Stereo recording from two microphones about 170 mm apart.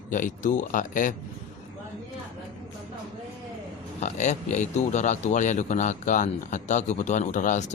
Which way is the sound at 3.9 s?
45° left (ahead or behind).